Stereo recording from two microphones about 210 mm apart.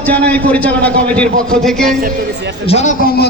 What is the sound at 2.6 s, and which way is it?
Speech, 35° left (ahead or behind).